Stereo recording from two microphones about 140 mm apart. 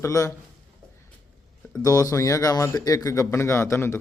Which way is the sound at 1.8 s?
25° left (ahead or behind).